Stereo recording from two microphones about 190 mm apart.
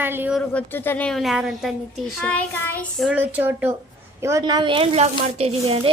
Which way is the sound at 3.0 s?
10° right (ahead or behind).